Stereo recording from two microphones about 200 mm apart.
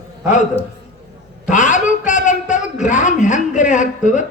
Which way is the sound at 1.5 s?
40° left (ahead or behind).